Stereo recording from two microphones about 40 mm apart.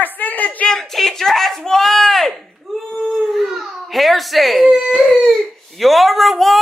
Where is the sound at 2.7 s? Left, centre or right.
Centre.